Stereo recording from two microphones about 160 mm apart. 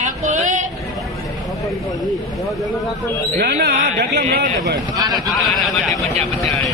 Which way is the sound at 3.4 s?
85° right.